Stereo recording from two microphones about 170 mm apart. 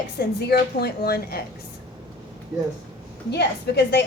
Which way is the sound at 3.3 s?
85° left.